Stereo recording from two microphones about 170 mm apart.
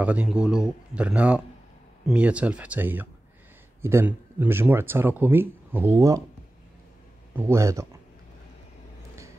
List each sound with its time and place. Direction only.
0.0 s speech: 10° right (ahead or behind)
7.3 s speech: 15° right (ahead or behind)